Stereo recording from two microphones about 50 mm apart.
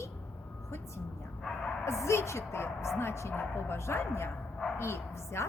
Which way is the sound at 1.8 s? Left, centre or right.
Left.